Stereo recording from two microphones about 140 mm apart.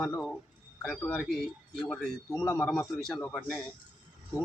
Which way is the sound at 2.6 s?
10° left (ahead or behind).